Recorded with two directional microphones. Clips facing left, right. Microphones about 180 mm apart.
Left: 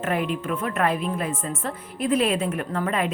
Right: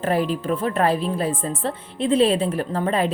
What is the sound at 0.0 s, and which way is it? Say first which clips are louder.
Speech: right 4 dB; 35° right (ahead or behind).